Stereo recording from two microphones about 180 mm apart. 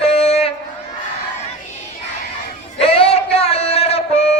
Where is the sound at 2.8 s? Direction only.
35° left (ahead or behind).